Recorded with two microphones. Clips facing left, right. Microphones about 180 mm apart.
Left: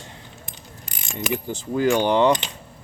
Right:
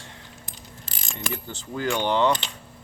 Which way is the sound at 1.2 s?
15° left (ahead or behind).